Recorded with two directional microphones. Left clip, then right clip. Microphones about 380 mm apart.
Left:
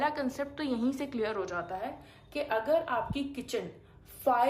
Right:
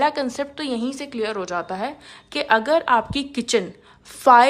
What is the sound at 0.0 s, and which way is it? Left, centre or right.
A woman's voice, centre.